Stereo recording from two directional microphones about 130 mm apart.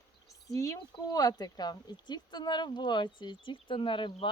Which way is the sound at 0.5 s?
25° left (ahead or behind).